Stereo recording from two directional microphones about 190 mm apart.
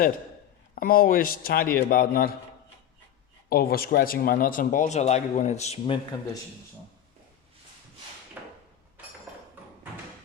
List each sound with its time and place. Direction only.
0.8 s speech: 50° left (ahead or behind)
3.5 s speech: 50° left (ahead or behind); by 6.0 s 30° left (ahead or behind)
8.4 s a sound: 10° right (ahead or behind)